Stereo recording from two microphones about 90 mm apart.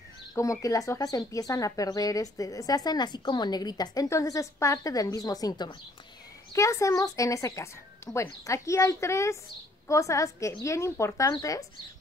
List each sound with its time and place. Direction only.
0.3 s speech: 40° left (ahead or behind)
6.5 s speech: 35° left (ahead or behind)